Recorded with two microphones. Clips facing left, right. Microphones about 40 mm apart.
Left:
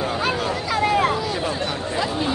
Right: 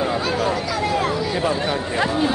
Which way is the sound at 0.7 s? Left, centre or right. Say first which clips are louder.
Left 2 dB; left.